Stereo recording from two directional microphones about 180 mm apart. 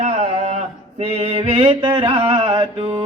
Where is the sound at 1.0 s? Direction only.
35° right (ahead or behind).